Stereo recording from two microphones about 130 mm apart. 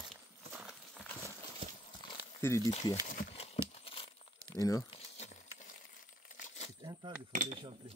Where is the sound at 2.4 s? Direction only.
20° left (ahead or behind).